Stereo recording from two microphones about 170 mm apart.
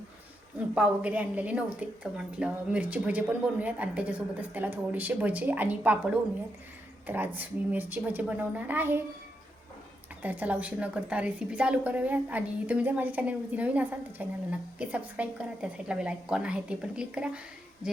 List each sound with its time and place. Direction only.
0.7 s a woman's voice: 5° right (ahead or behind)
10.2 s a woman's voice: 10° right (ahead or behind)